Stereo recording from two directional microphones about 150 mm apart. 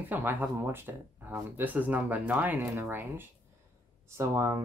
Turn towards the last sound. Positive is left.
turn(degrees=-20)  # may be behind; listen again after turning